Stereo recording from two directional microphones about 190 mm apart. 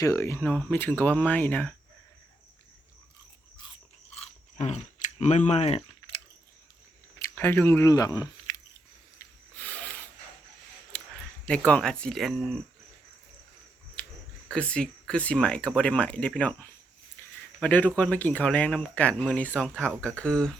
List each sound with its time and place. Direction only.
0.0 s speech: 15° left (ahead or behind)
4.1 s chewing: 35° left (ahead or behind)
7.2 s speech: 10° left (ahead or behind)
9.6 s a sound: 10° left (ahead or behind)
11.4 s speech: 5° left (ahead or behind)
14.0 s a sound: 10° left (ahead or behind)
14.4 s speech: 5° left (ahead or behind)
17.2 s a sound: 10° left (ahead or behind)
17.6 s speech: 10° left (ahead or behind)